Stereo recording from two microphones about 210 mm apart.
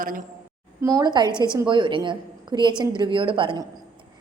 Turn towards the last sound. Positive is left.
turn(degrees=-20)  # may be behind; listen again after turning